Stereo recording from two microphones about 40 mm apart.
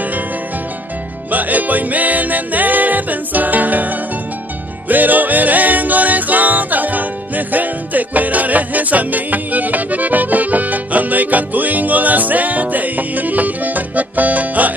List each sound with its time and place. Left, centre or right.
1.3 s music: right